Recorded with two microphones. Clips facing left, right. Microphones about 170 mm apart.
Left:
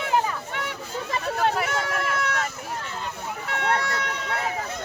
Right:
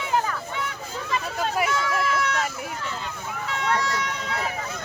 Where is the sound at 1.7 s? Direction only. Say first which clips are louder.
Right 2 dB; 60° left (ahead or behind).